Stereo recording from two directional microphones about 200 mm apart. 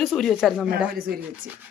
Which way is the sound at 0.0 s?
Centre (ahead or behind).